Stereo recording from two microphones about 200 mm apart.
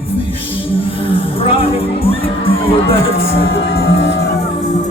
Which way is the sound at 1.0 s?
25° left (ahead or behind).